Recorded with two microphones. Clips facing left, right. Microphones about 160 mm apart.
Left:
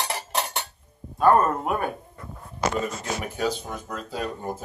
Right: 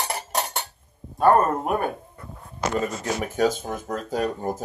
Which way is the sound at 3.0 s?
45° right (ahead or behind).